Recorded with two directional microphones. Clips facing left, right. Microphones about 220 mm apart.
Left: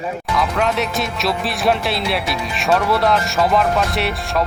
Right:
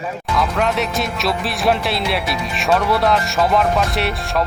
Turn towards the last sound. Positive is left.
turn(degrees=0)  # may be behind; listen again after turning